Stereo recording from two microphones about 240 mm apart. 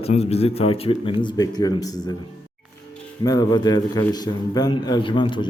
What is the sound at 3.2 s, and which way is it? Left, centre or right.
A man's voice, centre.